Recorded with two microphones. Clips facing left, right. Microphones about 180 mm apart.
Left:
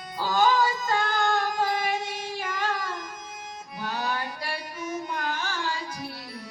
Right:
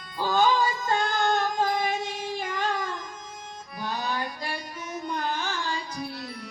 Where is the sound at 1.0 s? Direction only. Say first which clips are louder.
Right 2 dB; 20° right (ahead or behind).